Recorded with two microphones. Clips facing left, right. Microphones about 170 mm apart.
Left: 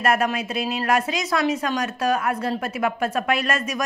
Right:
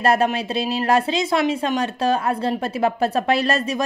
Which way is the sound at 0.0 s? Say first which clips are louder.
Right 3 dB; 30° right (ahead or behind).